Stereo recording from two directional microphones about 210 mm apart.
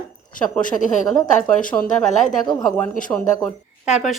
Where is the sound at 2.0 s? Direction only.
35° left (ahead or behind).